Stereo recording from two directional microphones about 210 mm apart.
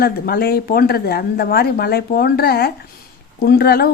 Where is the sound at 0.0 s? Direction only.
45° left (ahead or behind).